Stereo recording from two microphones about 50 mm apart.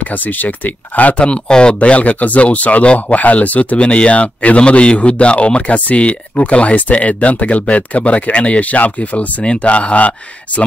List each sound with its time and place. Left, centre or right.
0.0 s speech: left
1.2 s speech: centre